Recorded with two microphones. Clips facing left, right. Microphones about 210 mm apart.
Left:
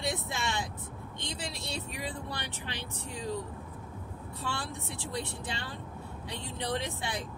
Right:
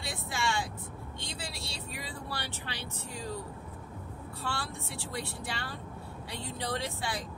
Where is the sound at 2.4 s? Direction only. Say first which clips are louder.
Left 1 dB; 20° left (ahead or behind).